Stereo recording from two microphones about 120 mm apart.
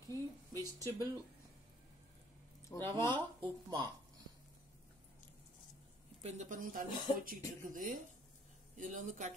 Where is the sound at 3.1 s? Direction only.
35° right (ahead or behind).